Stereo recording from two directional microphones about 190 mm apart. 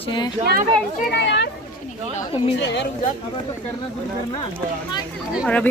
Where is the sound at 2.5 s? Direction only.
65° left (ahead or behind).